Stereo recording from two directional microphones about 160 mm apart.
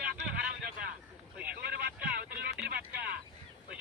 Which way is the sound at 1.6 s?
75° right (ahead or behind).